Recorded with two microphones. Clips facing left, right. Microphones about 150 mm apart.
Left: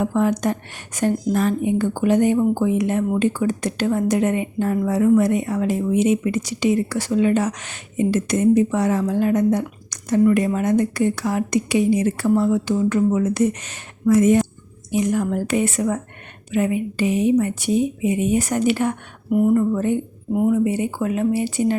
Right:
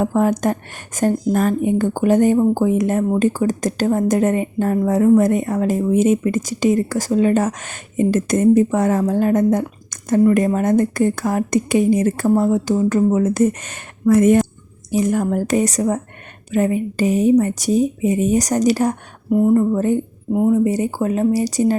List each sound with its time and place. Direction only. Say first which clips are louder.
0.0 s speech: right 2 dB; 45° right (ahead or behind)
14.8 s speech: right 2 dB; 40° right (ahead or behind)
19.3 s speech: right 2 dB; 25° right (ahead or behind)
20.3 s speech: right 3 dB; 25° right (ahead or behind)
20.7 s speech: right 3 dB; 40° right (ahead or behind)